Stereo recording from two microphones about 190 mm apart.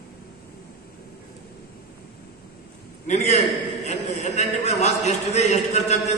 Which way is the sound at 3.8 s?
40° left (ahead or behind).